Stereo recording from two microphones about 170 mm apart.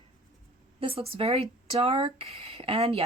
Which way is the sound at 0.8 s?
35° right (ahead or behind).